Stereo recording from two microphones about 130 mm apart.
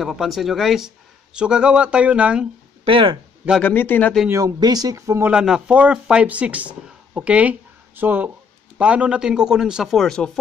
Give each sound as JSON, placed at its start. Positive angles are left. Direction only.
{"t": 0.0, "sound": "speech", "side_deg": 0}
{"t": 2.8, "sound": "speech", "side_deg": -40}
{"t": 3.6, "sound": "a man's voice", "side_deg": 15}
{"t": 4.3, "sound": "speech", "side_deg": -25}
{"t": 5.3, "sound": "a man's voice", "side_deg": -5}